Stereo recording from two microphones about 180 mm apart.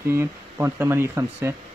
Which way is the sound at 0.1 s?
15° right (ahead or behind).